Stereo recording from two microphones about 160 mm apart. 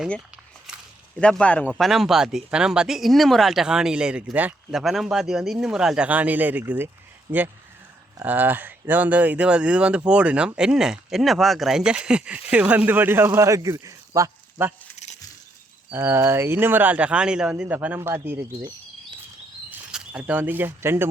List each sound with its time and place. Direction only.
1.2 s speech: 5° left (ahead or behind); by 14.7 s 20° right (ahead or behind)
14.9 s a sound: 45° left (ahead or behind)
15.9 s speech: 15° right (ahead or behind)
19.9 s speech: 5° right (ahead or behind)